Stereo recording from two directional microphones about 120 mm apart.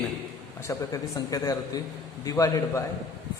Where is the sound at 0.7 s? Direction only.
30° left (ahead or behind).